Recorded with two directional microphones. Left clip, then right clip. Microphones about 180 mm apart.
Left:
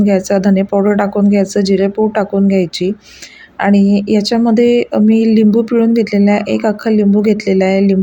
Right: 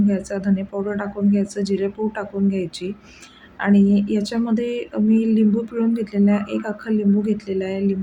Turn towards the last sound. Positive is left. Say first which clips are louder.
# left 11 dB
turn(degrees=40)  # may be behind; listen again after turning